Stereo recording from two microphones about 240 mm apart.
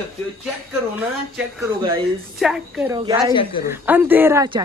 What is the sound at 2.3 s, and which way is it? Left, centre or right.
Speech, centre.